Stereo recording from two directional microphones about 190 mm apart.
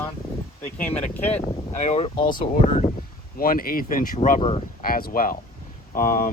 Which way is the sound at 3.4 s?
50° left (ahead or behind).